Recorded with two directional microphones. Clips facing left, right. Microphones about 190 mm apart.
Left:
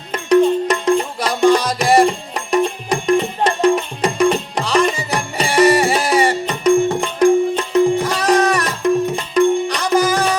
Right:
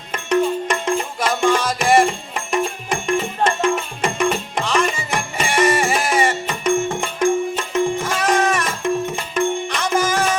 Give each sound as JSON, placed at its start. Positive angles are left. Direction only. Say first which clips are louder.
{"t": 0.1, "sound": "music", "louder": "left 6 dB", "side_deg": 35}